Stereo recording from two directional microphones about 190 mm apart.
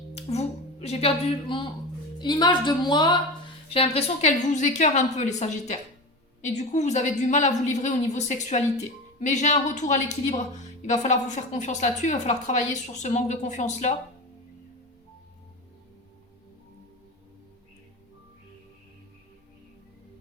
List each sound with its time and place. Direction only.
0.1 s a woman's voice: 35° left (ahead or behind)